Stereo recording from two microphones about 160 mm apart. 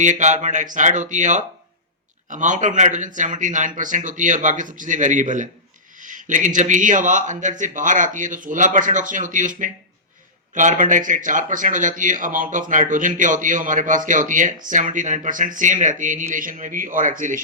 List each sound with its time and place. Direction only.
0.0 s speech: 50° right (ahead or behind)